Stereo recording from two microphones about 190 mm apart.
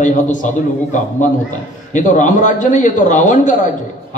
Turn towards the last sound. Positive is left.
turn(degrees=40)  # may be behind; listen again after turning